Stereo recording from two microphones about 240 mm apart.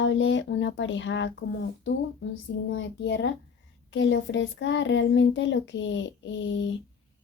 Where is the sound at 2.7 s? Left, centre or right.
Left.